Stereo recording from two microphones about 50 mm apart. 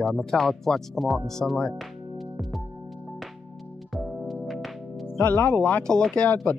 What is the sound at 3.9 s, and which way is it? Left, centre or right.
Music, centre.